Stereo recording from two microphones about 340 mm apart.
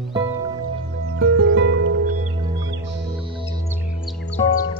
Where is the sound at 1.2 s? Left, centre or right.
Right.